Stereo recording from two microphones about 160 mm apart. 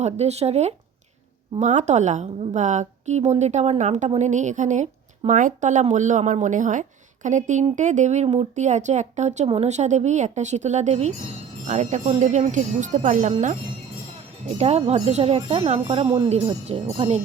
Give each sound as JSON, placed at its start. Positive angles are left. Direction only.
{"t": 0.0, "sound": "a woman's voice", "side_deg": -40}
{"t": 14.4, "sound": "speech", "side_deg": -40}